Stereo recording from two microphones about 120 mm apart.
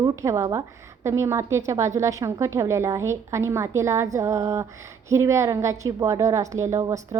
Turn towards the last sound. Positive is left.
turn(degrees=-30)  # may be behind; listen again after turning